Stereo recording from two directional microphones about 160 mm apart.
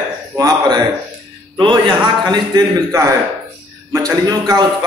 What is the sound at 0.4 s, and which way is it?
A man's voice, 25° right (ahead or behind).